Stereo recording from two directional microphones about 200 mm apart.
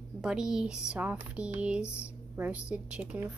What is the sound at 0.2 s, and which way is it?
A woman's voice, 5° right (ahead or behind).